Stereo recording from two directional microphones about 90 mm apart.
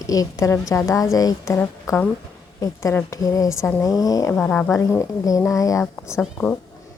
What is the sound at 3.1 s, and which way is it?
A woman's voice, 40° left (ahead or behind).